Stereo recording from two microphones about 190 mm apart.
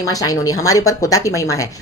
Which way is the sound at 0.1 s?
20° left (ahead or behind).